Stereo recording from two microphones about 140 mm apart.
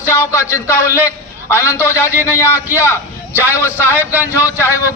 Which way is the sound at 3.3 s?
15° right (ahead or behind).